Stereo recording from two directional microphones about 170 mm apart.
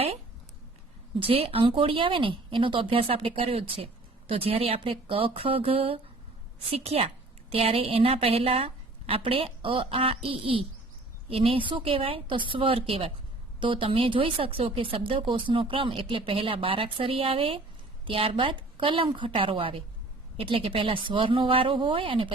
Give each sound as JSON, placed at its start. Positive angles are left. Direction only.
{"t": 1.2, "sound": "speech", "side_deg": -35}